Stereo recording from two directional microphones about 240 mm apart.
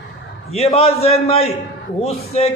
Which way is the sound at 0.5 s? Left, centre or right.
Left.